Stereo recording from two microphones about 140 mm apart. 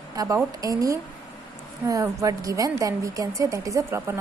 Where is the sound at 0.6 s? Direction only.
25° right (ahead or behind).